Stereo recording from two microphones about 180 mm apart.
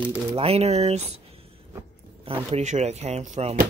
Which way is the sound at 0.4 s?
35° right (ahead or behind).